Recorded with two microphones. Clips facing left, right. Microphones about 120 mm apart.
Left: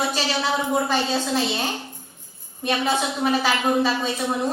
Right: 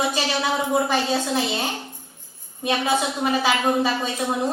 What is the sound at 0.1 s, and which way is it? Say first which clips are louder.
A woman's voice: even; 10° right (ahead or behind).